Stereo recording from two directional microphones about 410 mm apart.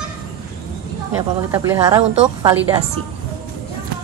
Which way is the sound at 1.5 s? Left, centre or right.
Centre.